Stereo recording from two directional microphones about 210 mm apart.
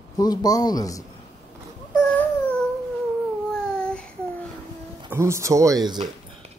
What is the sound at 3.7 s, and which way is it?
Child singing, 5° left (ahead or behind).